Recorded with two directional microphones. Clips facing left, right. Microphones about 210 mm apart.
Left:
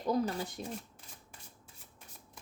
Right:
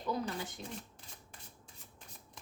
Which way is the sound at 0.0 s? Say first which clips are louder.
Left 5 dB; 40° left (ahead or behind).